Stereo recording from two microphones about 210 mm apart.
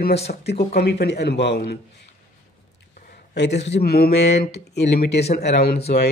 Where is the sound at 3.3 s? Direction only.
55° left (ahead or behind).